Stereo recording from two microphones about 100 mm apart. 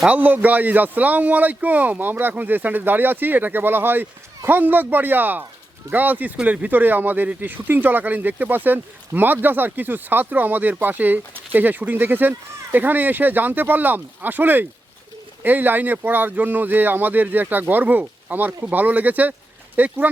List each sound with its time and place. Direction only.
0.0 s speech: 15° right (ahead or behind)